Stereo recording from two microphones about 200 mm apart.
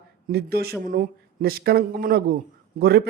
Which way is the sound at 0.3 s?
50° right (ahead or behind).